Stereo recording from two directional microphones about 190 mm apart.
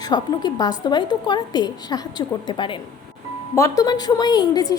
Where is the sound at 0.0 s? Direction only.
20° left (ahead or behind).